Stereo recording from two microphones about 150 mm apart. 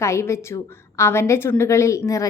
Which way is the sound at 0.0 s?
20° left (ahead or behind).